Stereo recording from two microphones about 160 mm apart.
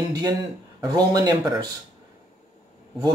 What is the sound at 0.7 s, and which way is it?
Speech, 25° right (ahead or behind).